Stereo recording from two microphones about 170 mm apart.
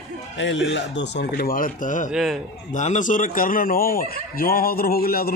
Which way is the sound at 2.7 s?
45° left (ahead or behind).